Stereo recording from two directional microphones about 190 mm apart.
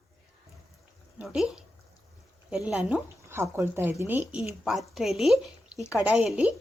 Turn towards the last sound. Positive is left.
turn(degrees=-5)  # may be behind; listen again after turning